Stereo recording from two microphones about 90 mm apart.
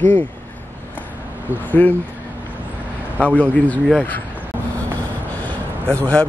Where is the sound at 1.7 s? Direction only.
20° left (ahead or behind).